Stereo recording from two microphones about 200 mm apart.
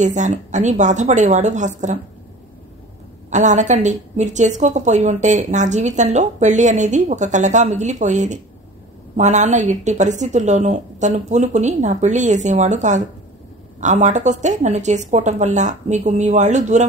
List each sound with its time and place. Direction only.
0.0 s a woman's voice: 35° right (ahead or behind)
3.3 s a woman's voice: 35° right (ahead or behind)